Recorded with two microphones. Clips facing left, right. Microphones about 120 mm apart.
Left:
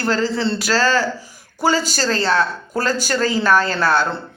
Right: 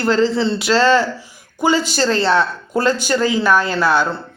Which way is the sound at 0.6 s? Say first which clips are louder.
Right 5 dB; 25° right (ahead or behind).